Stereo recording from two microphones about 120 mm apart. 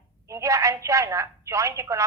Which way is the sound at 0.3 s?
25° right (ahead or behind).